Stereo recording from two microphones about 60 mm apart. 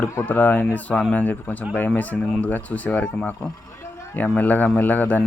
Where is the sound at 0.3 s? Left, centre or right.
Left.